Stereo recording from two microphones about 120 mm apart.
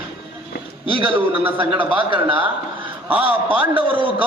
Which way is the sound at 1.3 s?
50° right (ahead or behind).